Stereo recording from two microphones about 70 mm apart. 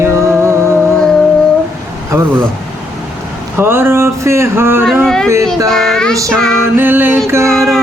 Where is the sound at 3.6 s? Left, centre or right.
Right.